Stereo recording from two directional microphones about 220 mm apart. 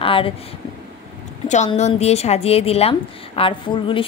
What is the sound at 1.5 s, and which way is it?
Speech, 30° left (ahead or behind).